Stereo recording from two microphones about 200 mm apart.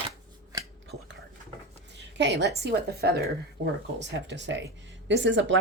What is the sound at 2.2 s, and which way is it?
Speech, 60° right (ahead or behind).